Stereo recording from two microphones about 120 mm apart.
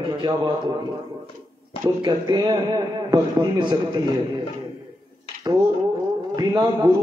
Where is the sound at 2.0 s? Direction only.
35° right (ahead or behind).